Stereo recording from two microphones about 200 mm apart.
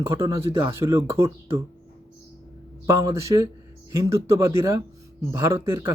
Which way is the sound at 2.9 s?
15° right (ahead or behind).